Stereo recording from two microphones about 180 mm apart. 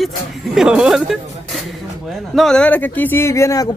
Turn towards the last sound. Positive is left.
turn(degrees=20)  # may be behind; listen again after turning